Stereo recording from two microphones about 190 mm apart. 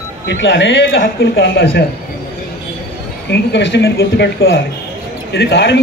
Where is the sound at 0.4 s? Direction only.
70° left (ahead or behind).